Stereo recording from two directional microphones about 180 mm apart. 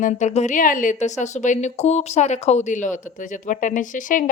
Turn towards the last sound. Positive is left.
turn(degrees=45)  # may be behind; listen again after turning